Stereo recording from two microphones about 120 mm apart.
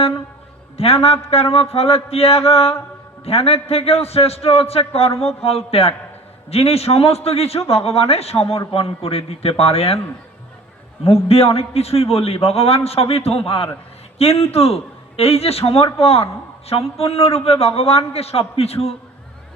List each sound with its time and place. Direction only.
0.8 s a man's voice: 55° left (ahead or behind)
11.0 s a man's voice: 55° left (ahead or behind)